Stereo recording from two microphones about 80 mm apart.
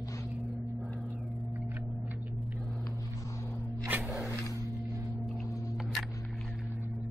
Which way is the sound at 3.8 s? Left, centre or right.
Right.